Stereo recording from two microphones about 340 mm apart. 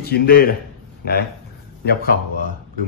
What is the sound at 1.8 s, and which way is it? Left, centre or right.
Speech, left.